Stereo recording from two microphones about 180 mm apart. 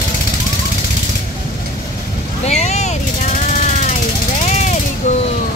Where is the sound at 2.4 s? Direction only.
40° left (ahead or behind).